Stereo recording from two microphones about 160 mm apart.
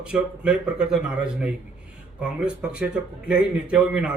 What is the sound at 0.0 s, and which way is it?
Speech, 5° right (ahead or behind).